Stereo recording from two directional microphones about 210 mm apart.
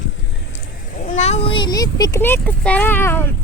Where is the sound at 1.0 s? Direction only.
35° left (ahead or behind).